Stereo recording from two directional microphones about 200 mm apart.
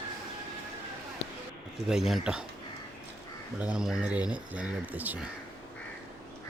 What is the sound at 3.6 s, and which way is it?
A man's voice, 5° right (ahead or behind).